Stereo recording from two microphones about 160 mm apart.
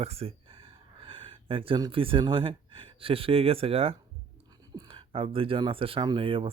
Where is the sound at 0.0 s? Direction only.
40° right (ahead or behind).